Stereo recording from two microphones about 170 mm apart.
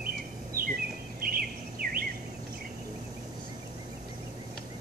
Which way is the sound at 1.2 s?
60° right (ahead or behind).